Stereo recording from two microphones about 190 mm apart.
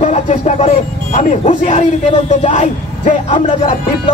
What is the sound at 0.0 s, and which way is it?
Speech, 35° left (ahead or behind).